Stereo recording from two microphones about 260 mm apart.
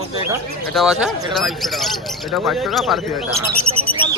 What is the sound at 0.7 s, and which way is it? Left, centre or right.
Speech, centre.